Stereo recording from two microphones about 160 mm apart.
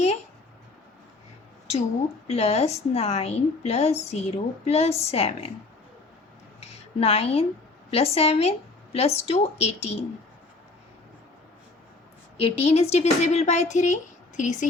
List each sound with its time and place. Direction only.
2.2 s a woman's voice: 40° left (ahead or behind)
6.6 s a sound: 40° left (ahead or behind)
7.9 s a woman's voice: 40° left (ahead or behind)
12.4 s speech: 40° left (ahead or behind)